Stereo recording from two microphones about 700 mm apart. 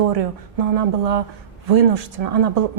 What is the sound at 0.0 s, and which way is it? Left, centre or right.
A woman's voice, right.